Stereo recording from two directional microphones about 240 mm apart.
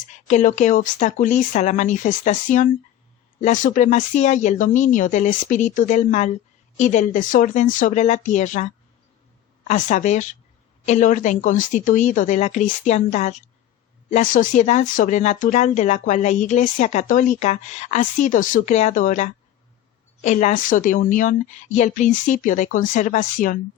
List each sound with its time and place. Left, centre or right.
0.1 s speech: left